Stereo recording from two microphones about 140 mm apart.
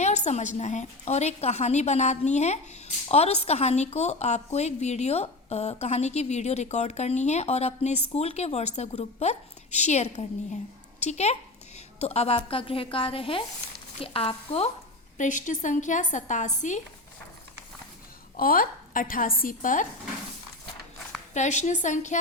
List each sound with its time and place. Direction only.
0.0 s a woman's voice: 55° left (ahead or behind)
15.2 s a woman's voice: 65° left (ahead or behind)
18.3 s a woman's voice: 90° left; by 19.9 s 70° left (ahead or behind)
21.3 s a woman's voice: 55° left (ahead or behind)